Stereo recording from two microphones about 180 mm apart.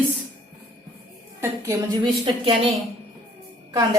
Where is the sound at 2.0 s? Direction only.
30° right (ahead or behind).